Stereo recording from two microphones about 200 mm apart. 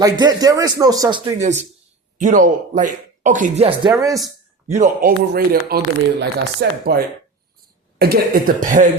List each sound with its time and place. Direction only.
0.0 s speech: 20° right (ahead or behind)
1.4 s speech: 35° right (ahead or behind)
3.9 s speech: 15° right (ahead or behind)
4.7 s speech: 40° right (ahead or behind)